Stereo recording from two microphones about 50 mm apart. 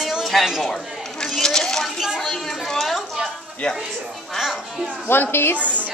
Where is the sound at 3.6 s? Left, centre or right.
Centre.